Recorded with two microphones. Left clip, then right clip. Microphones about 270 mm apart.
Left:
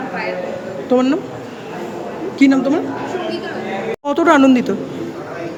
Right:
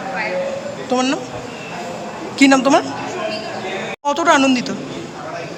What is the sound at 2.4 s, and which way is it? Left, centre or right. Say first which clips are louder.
Speech: right 3 dB; centre.